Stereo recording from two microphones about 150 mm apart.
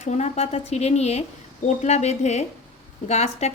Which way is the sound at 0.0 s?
50° left (ahead or behind).